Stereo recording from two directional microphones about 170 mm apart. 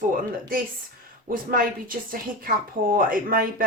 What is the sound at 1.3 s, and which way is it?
A woman's voice, 55° right (ahead or behind).